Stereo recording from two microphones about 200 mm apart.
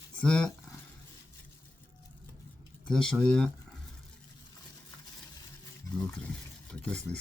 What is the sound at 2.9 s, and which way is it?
Speech, 5° left (ahead or behind).